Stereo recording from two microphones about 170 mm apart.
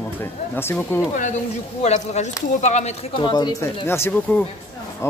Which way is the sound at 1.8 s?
40° left (ahead or behind).